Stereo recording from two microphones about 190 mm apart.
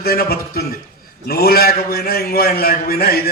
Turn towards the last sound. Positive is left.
turn(degrees=50)  # may be behind; listen again after turning